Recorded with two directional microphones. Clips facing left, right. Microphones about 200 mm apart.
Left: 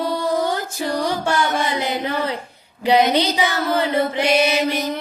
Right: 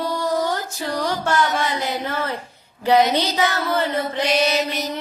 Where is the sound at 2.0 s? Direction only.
15° left (ahead or behind).